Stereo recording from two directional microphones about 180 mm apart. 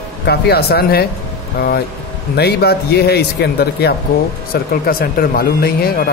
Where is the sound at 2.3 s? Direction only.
65° left (ahead or behind).